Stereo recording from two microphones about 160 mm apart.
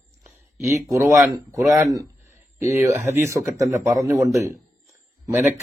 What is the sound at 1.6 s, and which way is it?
Speech, centre (ahead or behind).